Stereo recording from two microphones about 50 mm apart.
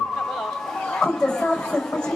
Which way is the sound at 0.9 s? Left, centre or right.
Centre.